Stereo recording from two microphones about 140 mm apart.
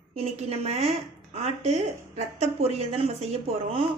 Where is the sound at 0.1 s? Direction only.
50° right (ahead or behind).